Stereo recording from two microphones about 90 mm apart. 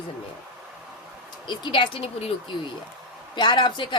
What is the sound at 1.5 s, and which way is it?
Speech, 60° left (ahead or behind).